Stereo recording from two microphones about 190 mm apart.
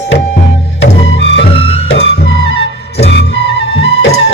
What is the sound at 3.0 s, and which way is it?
Music, 60° left (ahead or behind).